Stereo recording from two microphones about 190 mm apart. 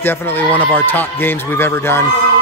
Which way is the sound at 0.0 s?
10° left (ahead or behind).